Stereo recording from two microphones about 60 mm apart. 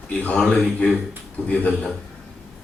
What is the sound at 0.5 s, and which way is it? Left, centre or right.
Speech, centre.